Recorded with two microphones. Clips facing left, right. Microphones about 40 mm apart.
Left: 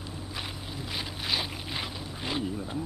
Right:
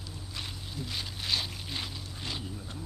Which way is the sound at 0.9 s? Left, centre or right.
Centre.